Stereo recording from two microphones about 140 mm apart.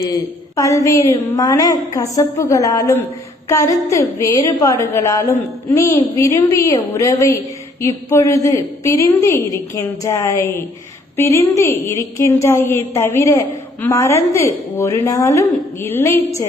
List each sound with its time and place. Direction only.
0.0 s a woman's voice: 25° left (ahead or behind)